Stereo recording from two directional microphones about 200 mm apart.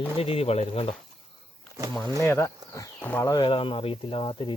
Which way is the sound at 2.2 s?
10° left (ahead or behind).